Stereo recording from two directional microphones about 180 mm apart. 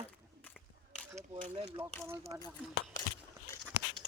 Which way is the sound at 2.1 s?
15° right (ahead or behind).